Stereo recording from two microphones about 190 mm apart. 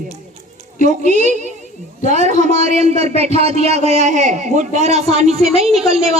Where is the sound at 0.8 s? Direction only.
40° right (ahead or behind).